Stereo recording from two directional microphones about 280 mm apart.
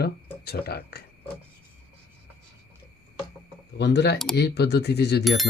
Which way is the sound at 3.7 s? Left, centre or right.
Left.